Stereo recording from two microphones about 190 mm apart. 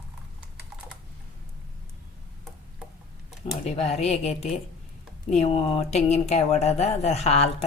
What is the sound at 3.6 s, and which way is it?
Speech, 35° left (ahead or behind).